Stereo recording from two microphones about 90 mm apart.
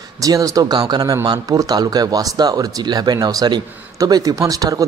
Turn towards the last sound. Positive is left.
turn(degrees=-40)  # may be behind; listen again after turning